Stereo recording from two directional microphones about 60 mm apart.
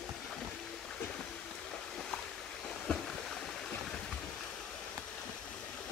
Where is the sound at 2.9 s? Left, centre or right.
Centre.